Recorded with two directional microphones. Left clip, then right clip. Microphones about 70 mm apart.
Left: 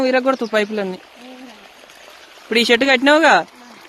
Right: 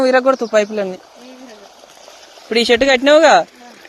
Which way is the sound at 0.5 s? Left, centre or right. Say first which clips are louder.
Right 4 dB; left.